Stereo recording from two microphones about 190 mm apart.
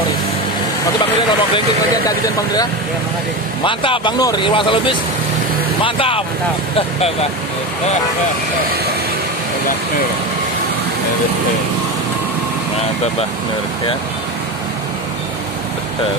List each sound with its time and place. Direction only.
2.0 s speech: 20° left (ahead or behind)